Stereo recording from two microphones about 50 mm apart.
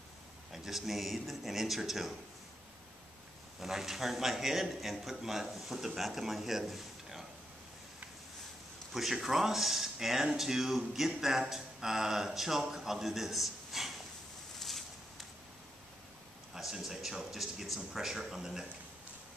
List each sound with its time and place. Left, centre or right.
0.5 s a man's voice: centre
3.5 s a man's voice: centre
8.9 s speech: centre
16.8 s speech: centre